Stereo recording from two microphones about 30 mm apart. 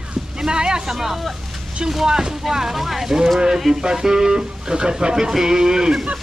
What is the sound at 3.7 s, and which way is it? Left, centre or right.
Speech, centre.